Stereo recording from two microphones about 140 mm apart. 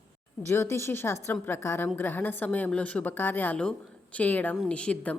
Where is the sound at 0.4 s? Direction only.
20° left (ahead or behind).